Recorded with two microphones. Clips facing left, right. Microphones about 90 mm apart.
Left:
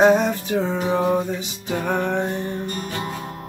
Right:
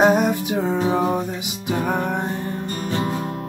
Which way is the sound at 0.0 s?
10° right (ahead or behind).